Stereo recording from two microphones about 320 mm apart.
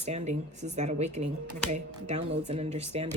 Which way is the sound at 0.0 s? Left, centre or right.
Right.